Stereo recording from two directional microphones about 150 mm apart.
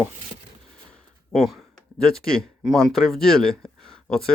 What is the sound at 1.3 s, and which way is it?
Speech, centre (ahead or behind).